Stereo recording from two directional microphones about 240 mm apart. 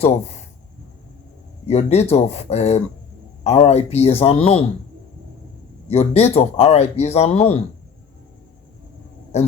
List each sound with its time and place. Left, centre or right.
1.6 s speech: left
5.9 s speech: left
9.3 s speech: left